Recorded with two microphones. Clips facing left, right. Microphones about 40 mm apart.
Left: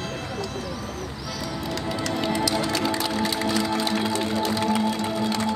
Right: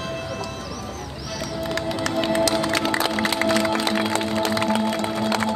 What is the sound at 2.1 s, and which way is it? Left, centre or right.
Music, right.